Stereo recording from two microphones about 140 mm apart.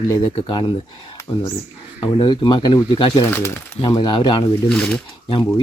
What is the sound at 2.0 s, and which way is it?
Speech, 30° left (ahead or behind).